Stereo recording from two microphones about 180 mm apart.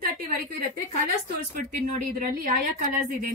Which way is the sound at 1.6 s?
50° right (ahead or behind).